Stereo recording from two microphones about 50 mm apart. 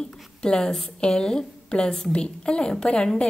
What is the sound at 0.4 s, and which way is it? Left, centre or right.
A woman's voice, centre.